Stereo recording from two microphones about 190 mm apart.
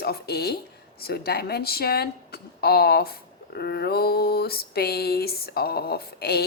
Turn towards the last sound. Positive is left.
turn(degrees=55)  # may be behind; listen again after turning